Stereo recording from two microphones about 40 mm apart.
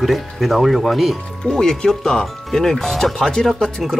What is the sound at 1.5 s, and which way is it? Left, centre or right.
Speech, centre.